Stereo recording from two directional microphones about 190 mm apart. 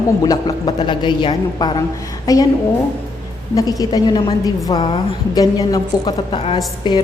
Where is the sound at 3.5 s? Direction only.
20° left (ahead or behind).